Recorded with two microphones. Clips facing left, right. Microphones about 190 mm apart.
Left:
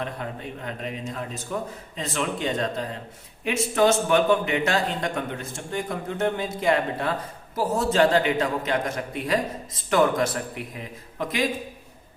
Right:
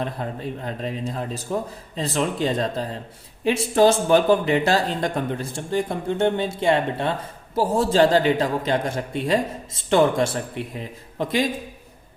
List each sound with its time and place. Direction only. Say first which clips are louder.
0.0 s speech: right 4 dB; 35° right (ahead or behind)